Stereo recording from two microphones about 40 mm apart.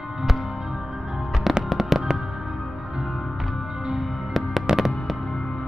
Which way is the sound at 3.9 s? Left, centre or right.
Centre.